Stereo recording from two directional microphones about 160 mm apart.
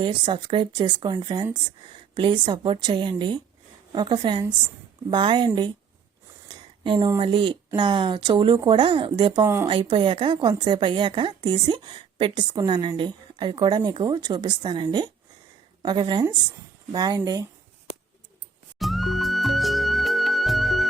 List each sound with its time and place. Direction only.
0.0 s a woman's voice: 30° right (ahead or behind)
6.8 s speech: 30° right (ahead or behind)
9.4 s speech: 15° right (ahead or behind)
9.6 s a woman's voice: 30° right (ahead or behind)
18.8 s music: centre (ahead or behind)